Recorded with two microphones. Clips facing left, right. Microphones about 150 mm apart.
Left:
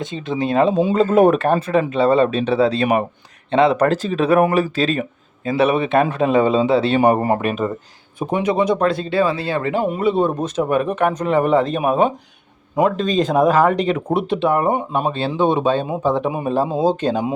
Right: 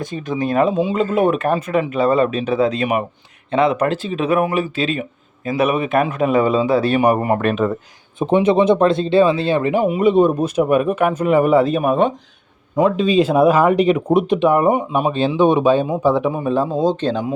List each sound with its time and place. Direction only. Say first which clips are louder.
0.0 s a man's voice: even; 25° left (ahead or behind)
0.8 s a man's voice: left 3 dB; 45° left (ahead or behind)
8.3 s speech: right 4 dB; 25° right (ahead or behind)
16.5 s speech: left 1 dB; 5° left (ahead or behind)